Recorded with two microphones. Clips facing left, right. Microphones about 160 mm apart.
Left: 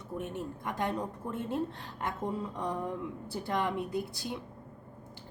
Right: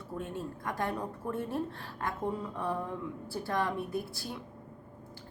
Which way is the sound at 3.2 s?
20° left (ahead or behind).